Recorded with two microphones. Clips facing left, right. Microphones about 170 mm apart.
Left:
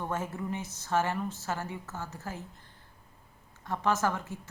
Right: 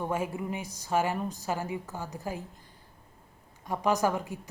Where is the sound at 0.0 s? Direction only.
10° right (ahead or behind).